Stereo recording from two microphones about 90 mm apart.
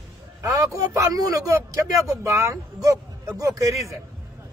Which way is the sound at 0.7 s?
40° right (ahead or behind).